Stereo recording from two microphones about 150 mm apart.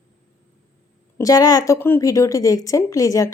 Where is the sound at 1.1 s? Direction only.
25° left (ahead or behind).